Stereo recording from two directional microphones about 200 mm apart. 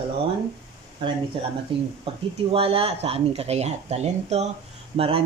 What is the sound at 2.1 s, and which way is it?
Speech, 30° right (ahead or behind).